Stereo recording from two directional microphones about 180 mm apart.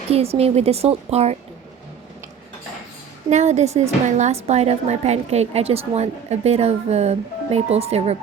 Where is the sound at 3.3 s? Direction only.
40° right (ahead or behind).